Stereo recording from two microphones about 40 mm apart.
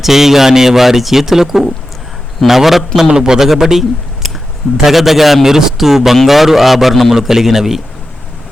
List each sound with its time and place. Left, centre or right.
0.0 s speech: centre
3.1 s a man's voice: right
3.3 s a man's voice: centre